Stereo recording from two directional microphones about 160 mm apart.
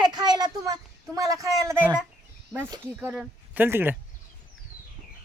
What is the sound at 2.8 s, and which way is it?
Speech, 15° right (ahead or behind).